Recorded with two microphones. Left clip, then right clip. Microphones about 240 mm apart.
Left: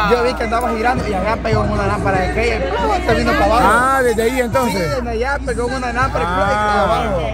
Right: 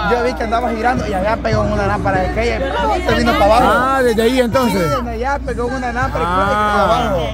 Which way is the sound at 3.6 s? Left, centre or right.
Centre.